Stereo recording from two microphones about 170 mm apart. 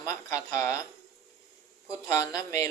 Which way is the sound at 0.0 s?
15° left (ahead or behind).